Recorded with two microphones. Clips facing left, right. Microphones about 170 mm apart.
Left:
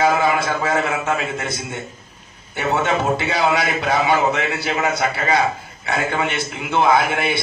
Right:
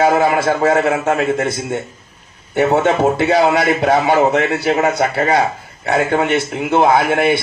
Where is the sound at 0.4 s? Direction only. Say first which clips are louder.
Right 7 dB; 45° right (ahead or behind).